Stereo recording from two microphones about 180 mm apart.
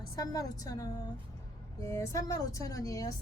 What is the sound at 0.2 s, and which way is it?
A woman's voice, 20° left (ahead or behind).